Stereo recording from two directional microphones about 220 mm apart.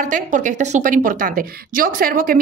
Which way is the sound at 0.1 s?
35° right (ahead or behind).